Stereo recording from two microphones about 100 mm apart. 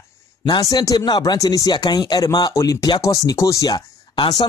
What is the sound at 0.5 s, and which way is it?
Speech, 40° left (ahead or behind).